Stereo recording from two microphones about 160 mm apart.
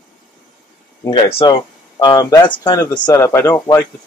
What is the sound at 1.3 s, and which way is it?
Speech, 30° left (ahead or behind).